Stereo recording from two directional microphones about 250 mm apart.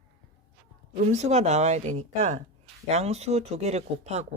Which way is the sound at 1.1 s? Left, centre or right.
Right.